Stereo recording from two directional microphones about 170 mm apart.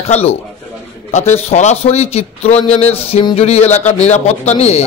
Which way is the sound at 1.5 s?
40° left (ahead or behind).